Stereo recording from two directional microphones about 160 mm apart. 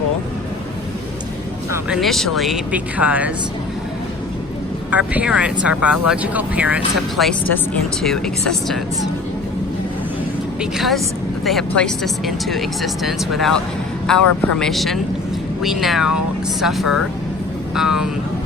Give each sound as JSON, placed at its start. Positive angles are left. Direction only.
{"t": 1.9, "sound": "speech", "side_deg": 0}
{"t": 4.9, "sound": "speech", "side_deg": -10}
{"t": 7.3, "sound": "speech", "side_deg": 5}
{"t": 10.6, "sound": "speech", "side_deg": 0}